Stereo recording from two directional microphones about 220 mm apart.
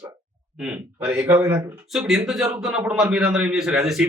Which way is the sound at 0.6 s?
5° right (ahead or behind).